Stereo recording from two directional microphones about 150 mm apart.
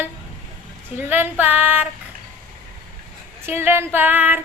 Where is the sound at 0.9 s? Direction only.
15° right (ahead or behind).